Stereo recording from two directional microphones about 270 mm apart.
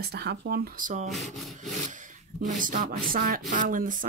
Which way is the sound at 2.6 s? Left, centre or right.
Right.